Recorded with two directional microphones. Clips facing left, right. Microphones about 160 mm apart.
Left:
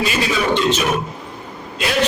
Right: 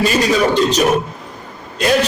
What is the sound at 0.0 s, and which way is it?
A man's voice, 40° right (ahead or behind).